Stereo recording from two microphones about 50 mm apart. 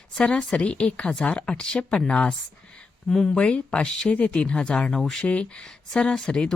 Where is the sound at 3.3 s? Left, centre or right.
Left.